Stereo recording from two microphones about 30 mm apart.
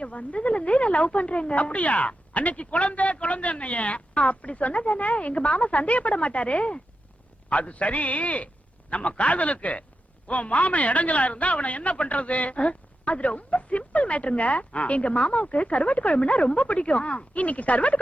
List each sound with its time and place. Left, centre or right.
0.0 s a man's voice: left